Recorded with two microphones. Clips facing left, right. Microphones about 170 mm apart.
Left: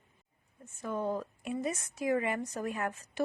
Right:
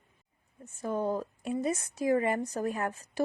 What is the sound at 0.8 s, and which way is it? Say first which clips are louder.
A woman's voice: right 3 dB; 40° right (ahead or behind).